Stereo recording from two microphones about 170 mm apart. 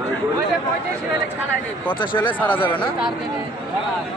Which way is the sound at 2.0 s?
30° left (ahead or behind).